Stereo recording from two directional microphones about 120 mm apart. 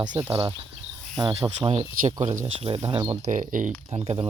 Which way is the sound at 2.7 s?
50° right (ahead or behind).